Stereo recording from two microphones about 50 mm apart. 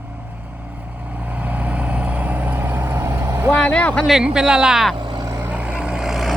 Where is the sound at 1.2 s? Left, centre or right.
Right.